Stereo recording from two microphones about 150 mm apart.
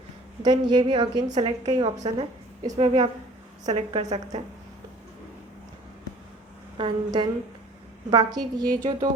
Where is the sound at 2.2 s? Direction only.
45° right (ahead or behind).